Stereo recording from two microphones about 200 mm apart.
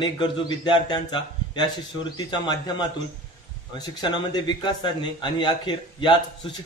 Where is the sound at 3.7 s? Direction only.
20° left (ahead or behind).